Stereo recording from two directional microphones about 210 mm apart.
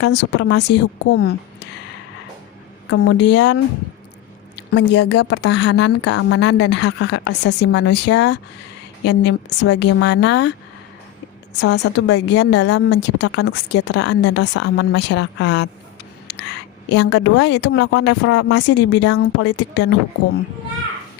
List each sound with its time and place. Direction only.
0.0 s a woman's voice: 55° left (ahead or behind)
2.9 s a woman's voice: 60° left (ahead or behind)
11.5 s a woman's voice: 55° left (ahead or behind)
16.2 s a sound: 55° left (ahead or behind)
16.9 s a woman's voice: 55° left (ahead or behind); by 18.5 s 75° left (ahead or behind)
18.5 s a woman's voice: 55° left (ahead or behind)